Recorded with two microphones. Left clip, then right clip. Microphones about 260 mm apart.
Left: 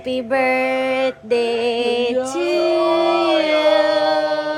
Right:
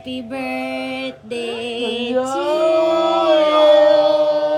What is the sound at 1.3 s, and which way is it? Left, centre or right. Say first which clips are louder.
Music: left 6 dB; left.